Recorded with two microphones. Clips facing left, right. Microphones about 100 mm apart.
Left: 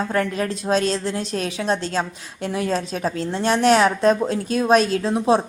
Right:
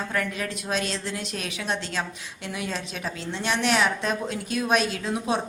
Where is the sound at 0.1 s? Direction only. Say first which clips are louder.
Left 7 dB; 35° left (ahead or behind).